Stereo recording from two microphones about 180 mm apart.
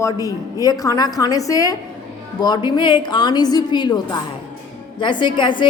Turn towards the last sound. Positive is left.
turn(degrees=25)  # may be behind; listen again after turning